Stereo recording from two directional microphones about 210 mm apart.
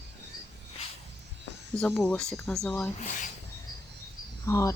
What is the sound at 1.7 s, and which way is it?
Speech, 5° left (ahead or behind).